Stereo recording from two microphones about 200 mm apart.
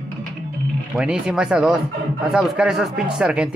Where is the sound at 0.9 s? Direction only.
5° right (ahead or behind).